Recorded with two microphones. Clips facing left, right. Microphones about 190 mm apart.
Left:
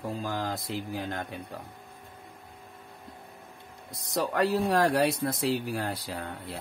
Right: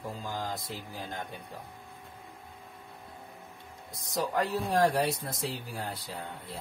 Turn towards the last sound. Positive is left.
turn(degrees=75)  # may be behind; listen again after turning